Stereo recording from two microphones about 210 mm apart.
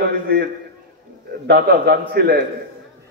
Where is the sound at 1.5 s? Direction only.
50° right (ahead or behind).